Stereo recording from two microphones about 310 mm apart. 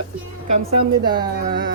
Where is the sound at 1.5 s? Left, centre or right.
Right.